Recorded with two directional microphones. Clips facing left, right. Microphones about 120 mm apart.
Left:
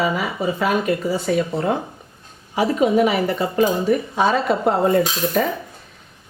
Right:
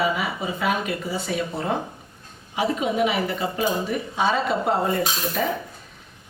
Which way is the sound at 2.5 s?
40° left (ahead or behind).